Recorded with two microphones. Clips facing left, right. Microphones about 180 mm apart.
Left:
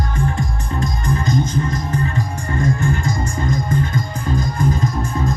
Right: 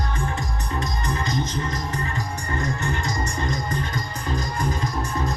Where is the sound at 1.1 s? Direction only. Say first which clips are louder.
Left 8 dB; 50° left (ahead or behind).